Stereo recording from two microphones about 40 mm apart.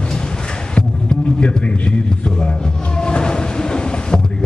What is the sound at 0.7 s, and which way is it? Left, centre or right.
Music, left.